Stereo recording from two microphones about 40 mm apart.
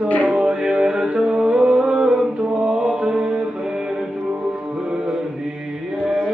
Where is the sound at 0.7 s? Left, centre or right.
Right.